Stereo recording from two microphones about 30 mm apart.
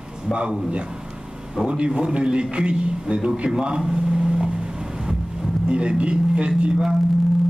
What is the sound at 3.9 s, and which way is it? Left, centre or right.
Vehicle, right.